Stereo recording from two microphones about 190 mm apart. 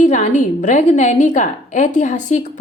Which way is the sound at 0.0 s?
40° left (ahead or behind).